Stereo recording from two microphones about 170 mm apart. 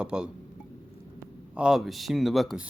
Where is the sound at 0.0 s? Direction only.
5° right (ahead or behind).